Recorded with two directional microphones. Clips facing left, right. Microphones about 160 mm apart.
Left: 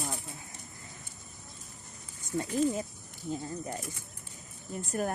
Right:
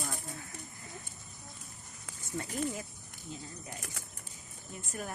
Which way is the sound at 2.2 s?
20° left (ahead or behind).